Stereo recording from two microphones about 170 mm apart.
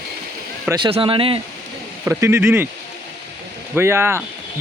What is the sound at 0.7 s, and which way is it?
Speech, 30° right (ahead or behind).